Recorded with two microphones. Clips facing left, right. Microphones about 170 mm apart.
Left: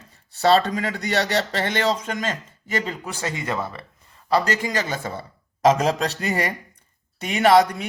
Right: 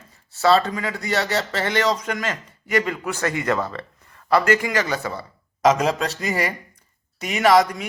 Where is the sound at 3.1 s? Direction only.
15° left (ahead or behind).